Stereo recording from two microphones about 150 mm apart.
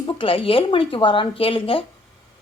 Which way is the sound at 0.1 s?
35° left (ahead or behind).